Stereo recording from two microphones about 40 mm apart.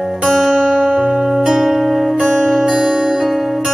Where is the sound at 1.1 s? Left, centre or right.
Centre.